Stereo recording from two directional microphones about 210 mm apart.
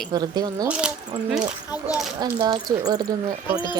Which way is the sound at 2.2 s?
20° right (ahead or behind).